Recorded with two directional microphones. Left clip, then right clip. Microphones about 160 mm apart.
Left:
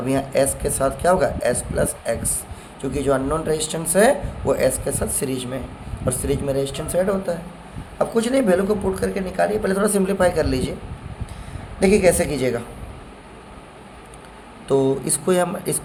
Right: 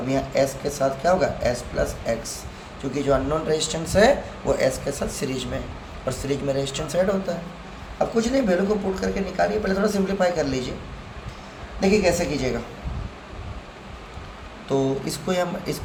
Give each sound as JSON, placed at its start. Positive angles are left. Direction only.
{"t": 0.1, "sound": "speech", "side_deg": 50}
{"t": 2.9, "sound": "speech", "side_deg": 40}
{"t": 7.9, "sound": "speech", "side_deg": 55}
{"t": 11.8, "sound": "a woman's voice", "side_deg": 60}
{"t": 14.7, "sound": "speech", "side_deg": 45}